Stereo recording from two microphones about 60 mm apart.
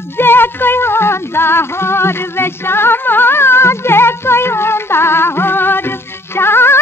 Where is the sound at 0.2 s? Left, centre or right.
Left.